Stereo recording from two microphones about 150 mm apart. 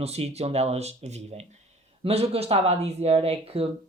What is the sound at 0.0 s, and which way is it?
Speech, 45° right (ahead or behind).